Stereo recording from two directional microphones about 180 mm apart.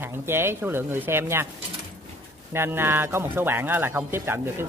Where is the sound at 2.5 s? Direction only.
15° right (ahead or behind).